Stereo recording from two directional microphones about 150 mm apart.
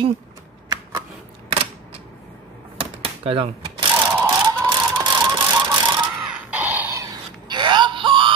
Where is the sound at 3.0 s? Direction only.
40° right (ahead or behind).